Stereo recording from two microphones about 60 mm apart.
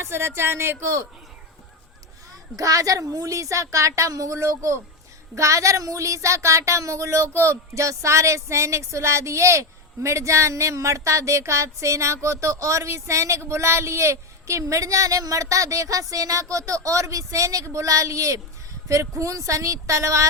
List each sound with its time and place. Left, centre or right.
0.0 s speech: right
2.6 s speech: right